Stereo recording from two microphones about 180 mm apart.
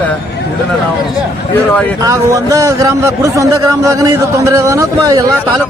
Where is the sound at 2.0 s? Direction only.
15° right (ahead or behind).